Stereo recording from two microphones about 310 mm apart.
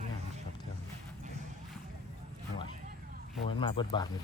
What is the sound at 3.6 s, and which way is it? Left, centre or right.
Speech, centre.